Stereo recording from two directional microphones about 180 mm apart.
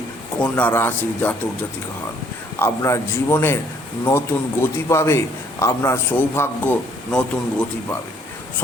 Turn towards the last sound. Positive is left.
turn(degrees=5)  # may be behind; listen again after turning